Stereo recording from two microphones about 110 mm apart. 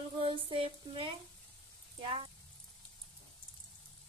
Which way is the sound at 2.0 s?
60° right (ahead or behind).